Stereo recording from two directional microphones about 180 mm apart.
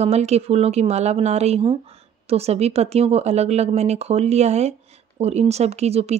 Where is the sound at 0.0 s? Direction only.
35° right (ahead or behind).